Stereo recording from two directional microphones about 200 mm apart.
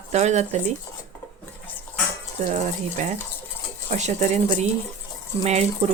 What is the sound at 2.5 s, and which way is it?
Speech, 35° right (ahead or behind).